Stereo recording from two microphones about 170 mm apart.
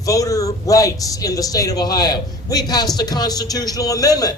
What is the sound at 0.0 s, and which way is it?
A man's voice, 20° left (ahead or behind).